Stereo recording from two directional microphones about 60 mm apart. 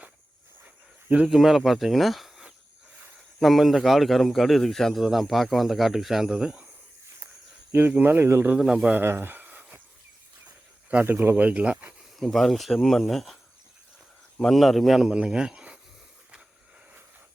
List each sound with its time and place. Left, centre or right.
1.3 s a man's voice: centre
3.4 s a man's voice: centre
7.7 s speech: right
8.5 s a man's voice: centre
9.0 s a sound: right
11.0 s speech: right
12.2 s a man's voice: centre
14.5 s a man's voice: centre
14.9 s speech: centre